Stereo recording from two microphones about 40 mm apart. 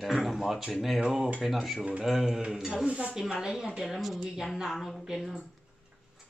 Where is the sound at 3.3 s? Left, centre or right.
Centre.